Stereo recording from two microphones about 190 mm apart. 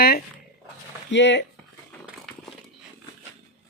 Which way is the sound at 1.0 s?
70° left (ahead or behind).